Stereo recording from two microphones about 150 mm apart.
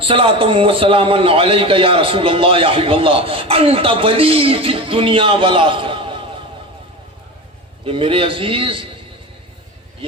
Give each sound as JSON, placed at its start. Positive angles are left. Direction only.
{"t": 0.0, "sound": "a man's voice", "side_deg": -35}
{"t": 7.9, "sound": "a man's voice", "side_deg": -35}